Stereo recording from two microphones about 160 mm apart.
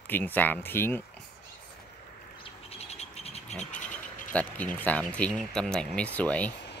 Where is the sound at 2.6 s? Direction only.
40° left (ahead or behind).